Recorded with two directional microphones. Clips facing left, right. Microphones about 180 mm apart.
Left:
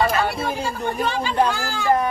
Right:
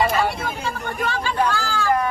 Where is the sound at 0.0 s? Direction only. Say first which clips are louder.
Even; centre (ahead or behind).